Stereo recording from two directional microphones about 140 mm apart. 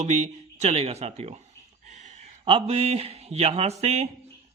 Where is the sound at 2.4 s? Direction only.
40° right (ahead or behind).